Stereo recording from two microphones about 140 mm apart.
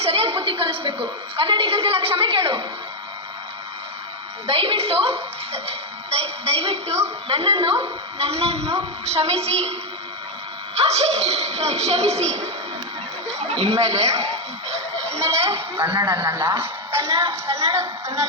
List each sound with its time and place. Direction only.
0.0 s a sound: 45° right (ahead or behind)
4.4 s a woman's voice: 40° right (ahead or behind)
10.8 s a woman's voice: 50° right (ahead or behind)
15.2 s a woman's voice: 20° right (ahead or behind)